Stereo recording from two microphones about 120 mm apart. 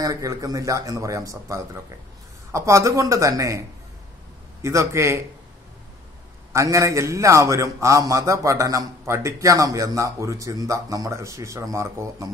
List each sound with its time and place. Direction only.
0.0 s a man's voice: 30° right (ahead or behind)
6.5 s a man's voice: 25° right (ahead or behind)